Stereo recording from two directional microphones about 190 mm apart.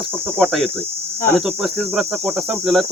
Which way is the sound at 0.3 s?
5° left (ahead or behind).